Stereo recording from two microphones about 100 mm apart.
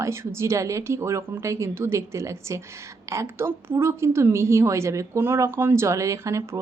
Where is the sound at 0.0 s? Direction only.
25° right (ahead or behind).